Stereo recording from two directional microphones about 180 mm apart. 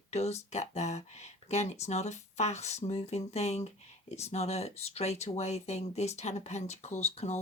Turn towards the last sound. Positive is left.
turn(degrees=40)  # may be behind; listen again after turning